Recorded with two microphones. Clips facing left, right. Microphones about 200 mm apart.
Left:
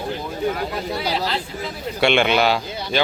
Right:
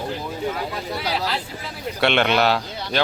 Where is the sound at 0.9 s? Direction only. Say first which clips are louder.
Left 1 dB; centre (ahead or behind).